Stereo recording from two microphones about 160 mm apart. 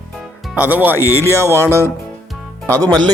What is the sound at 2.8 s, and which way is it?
Speech, 25° right (ahead or behind).